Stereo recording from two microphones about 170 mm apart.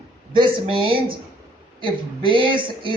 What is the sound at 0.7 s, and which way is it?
Speech, 30° right (ahead or behind).